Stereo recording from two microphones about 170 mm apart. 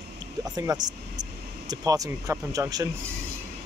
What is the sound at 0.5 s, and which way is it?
Speech, 20° right (ahead or behind).